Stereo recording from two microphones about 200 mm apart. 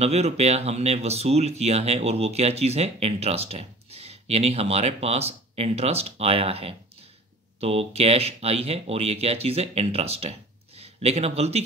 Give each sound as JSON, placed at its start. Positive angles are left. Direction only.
{"t": 0.0, "sound": "a man's voice", "side_deg": -30}